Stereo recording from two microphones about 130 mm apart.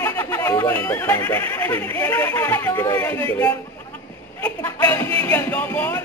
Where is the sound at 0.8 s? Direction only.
15° left (ahead or behind).